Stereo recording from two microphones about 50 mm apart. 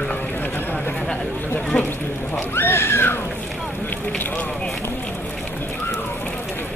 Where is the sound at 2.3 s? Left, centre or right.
Left.